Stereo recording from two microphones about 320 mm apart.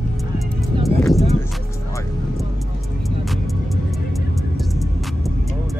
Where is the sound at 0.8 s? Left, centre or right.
Centre.